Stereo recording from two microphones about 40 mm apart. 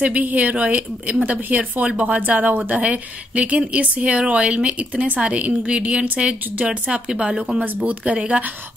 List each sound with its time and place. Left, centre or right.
0.0 s speech: right
7.1 s speech: centre
7.5 s speech: right